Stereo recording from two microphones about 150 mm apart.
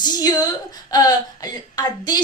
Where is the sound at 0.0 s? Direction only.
25° left (ahead or behind).